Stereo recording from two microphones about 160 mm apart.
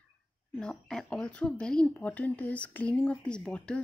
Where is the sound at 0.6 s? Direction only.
5° left (ahead or behind).